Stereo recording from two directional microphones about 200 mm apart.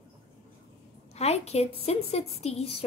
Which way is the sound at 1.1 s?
30° left (ahead or behind).